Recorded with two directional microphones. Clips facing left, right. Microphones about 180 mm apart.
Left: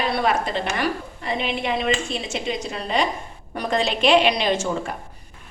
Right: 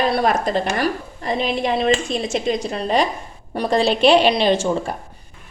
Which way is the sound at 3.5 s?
30° right (ahead or behind).